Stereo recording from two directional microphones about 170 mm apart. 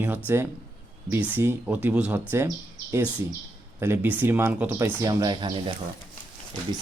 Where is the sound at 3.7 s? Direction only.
15° right (ahead or behind).